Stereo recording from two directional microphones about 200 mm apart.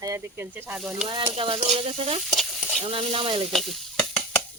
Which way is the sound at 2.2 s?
Centre (ahead or behind).